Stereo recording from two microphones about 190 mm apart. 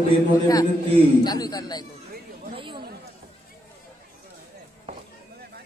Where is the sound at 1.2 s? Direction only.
20° left (ahead or behind).